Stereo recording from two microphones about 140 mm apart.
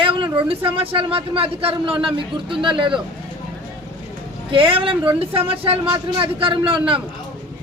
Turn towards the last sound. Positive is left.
turn(degrees=-40)  # may be behind; listen again after turning